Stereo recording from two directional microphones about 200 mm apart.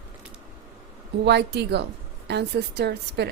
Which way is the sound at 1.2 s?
55° right (ahead or behind).